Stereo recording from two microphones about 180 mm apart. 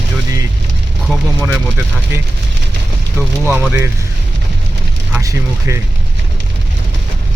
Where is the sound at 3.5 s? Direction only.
10° right (ahead or behind).